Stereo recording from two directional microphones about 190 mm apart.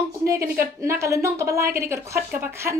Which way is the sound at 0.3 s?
15° right (ahead or behind).